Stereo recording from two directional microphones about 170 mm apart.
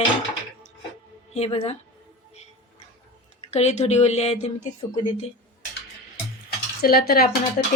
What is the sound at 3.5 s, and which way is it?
A woman's voice, 40° left (ahead or behind).